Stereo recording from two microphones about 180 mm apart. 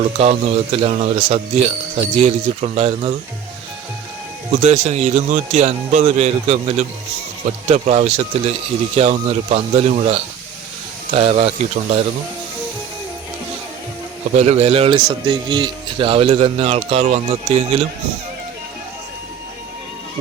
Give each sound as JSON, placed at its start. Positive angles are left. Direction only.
{"t": 0.2, "sound": "a man's voice", "side_deg": -35}
{"t": 4.6, "sound": "a man's voice", "side_deg": -35}
{"t": 14.3, "sound": "a man's voice", "side_deg": -35}